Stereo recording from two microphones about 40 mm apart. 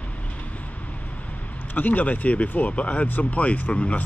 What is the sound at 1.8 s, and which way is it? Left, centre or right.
Speech, left.